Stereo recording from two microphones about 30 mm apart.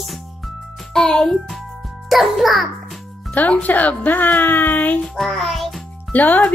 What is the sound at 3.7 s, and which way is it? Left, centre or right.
A woman's voice, left.